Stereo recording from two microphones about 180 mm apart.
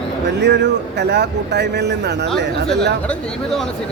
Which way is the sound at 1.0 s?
65° right (ahead or behind).